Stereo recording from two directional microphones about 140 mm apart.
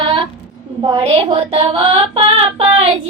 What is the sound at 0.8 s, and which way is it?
Female singing, 40° right (ahead or behind).